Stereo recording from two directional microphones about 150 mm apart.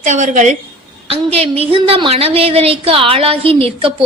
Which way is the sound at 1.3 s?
40° right (ahead or behind).